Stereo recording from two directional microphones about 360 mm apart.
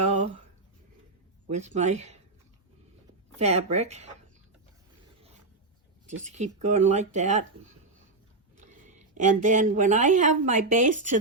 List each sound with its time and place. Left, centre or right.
1.5 s speech: centre
3.3 s speech: centre
6.1 s speech: centre
8.5 s a woman's voice: right